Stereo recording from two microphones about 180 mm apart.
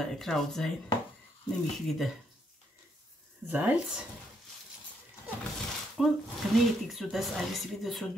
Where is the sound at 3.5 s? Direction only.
10° right (ahead or behind).